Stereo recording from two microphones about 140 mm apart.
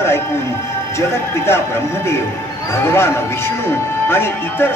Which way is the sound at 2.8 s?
15° left (ahead or behind).